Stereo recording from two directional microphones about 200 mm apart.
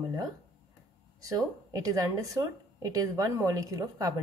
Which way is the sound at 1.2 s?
15° right (ahead or behind).